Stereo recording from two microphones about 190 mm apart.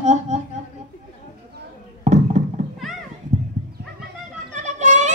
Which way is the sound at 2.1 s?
40° right (ahead or behind).